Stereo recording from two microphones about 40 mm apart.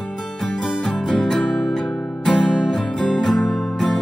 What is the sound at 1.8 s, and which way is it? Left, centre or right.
Music, left.